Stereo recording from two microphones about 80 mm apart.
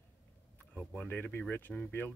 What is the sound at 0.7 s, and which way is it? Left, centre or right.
Speech, left.